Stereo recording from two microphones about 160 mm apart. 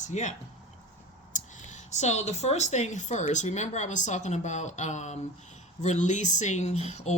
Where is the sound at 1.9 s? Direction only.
45° left (ahead or behind).